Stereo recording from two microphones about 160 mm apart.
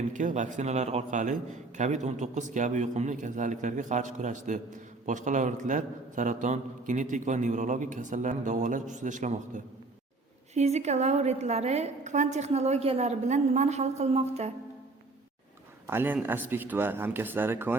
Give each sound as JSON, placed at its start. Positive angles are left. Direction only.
{"t": 0.1, "sound": "a man's voice", "side_deg": -50}
{"t": 10.5, "sound": "a man's voice", "side_deg": -45}
{"t": 15.9, "sound": "speech", "side_deg": -15}